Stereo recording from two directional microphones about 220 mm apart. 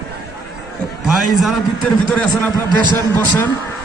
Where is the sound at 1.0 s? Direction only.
Centre (ahead or behind).